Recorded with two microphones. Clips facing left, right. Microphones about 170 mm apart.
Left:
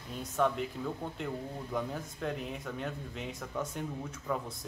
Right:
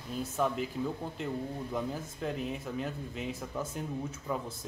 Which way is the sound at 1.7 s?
Centre (ahead or behind).